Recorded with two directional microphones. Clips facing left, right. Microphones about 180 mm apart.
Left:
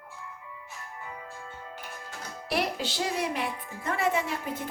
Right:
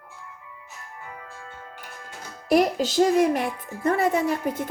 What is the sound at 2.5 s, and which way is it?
A woman's voice, 45° right (ahead or behind).